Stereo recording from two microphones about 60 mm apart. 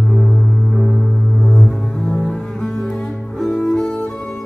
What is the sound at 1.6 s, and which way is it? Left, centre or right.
Cello, centre.